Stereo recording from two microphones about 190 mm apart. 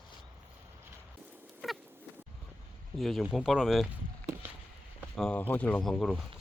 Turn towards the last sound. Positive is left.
turn(degrees=5)  # may be behind; listen again after turning